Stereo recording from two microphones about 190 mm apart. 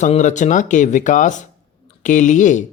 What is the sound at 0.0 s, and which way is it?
Speech, 40° left (ahead or behind).